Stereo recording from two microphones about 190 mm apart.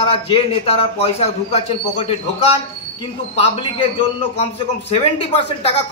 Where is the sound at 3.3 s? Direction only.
30° left (ahead or behind).